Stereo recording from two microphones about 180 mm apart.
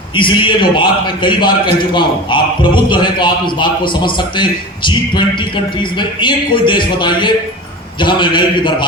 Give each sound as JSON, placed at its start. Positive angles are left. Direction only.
{"t": 0.2, "sound": "a man's voice", "side_deg": 25}